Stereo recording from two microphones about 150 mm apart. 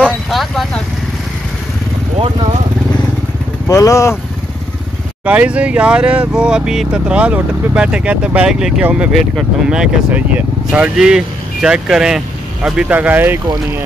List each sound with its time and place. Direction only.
0.0 s vehicle: centre (ahead or behind)
3.6 s speech: 20° left (ahead or behind)
5.2 s speech: 10° right (ahead or behind)